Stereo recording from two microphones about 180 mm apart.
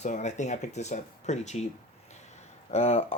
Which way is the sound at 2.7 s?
35° left (ahead or behind).